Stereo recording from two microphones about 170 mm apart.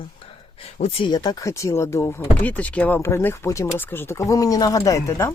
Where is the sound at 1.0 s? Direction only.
25° left (ahead or behind).